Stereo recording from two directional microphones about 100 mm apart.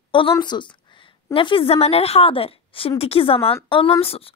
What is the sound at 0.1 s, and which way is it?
A woman's voice, 60° left (ahead or behind).